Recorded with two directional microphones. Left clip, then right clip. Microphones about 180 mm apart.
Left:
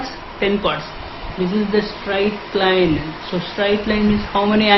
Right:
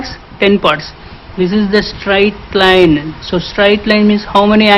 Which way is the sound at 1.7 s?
40° right (ahead or behind).